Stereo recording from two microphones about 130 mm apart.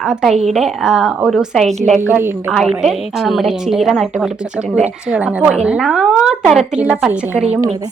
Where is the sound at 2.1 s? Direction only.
15° right (ahead or behind).